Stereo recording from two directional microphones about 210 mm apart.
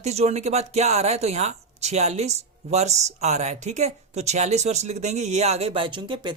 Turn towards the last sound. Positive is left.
turn(degrees=-20)  # may be behind; listen again after turning